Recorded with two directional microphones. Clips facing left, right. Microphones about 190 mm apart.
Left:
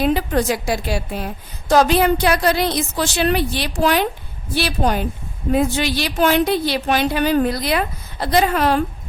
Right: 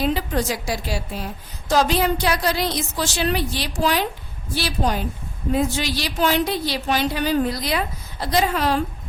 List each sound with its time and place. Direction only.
0.0 s a woman's voice: 55° left (ahead or behind)